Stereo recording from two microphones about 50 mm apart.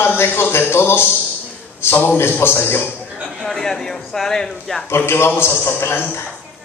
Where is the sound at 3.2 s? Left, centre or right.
Centre.